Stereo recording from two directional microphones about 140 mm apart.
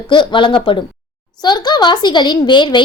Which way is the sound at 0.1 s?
35° left (ahead or behind).